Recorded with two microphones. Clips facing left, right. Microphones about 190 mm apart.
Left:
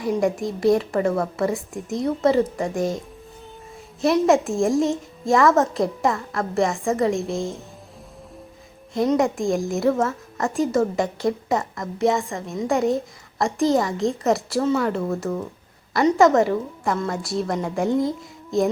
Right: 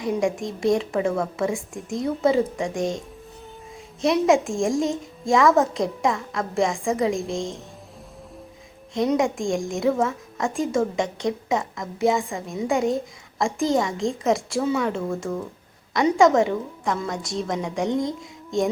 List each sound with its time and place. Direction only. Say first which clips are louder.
0.0 s a woman's voice: left 2 dB; centre (ahead or behind)
4.0 s a woman's voice: left 1 dB; centre (ahead or behind)
9.1 s a woman's voice: left 2 dB; centre (ahead or behind)